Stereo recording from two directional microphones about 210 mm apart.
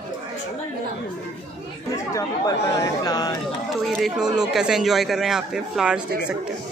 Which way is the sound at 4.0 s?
Centre (ahead or behind).